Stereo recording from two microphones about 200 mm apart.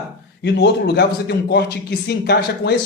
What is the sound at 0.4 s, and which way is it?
Speech, 55° left (ahead or behind).